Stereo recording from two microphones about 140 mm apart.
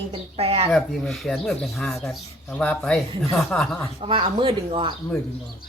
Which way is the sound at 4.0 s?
40° right (ahead or behind).